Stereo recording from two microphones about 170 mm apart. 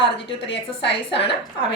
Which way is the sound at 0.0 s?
30° left (ahead or behind).